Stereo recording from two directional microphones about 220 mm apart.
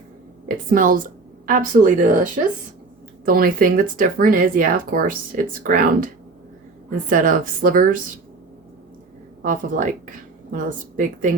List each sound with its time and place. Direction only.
0.7 s speech: 40° right (ahead or behind)
7.1 s speech: 40° right (ahead or behind)
9.4 s speech: 35° right (ahead or behind)